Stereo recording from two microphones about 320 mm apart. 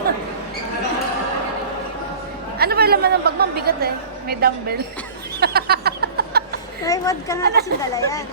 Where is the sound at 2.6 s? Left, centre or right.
Right.